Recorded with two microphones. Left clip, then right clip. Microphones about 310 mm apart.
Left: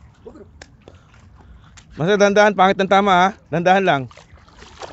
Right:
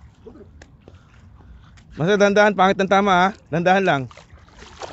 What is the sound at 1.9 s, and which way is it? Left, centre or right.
Speech, centre.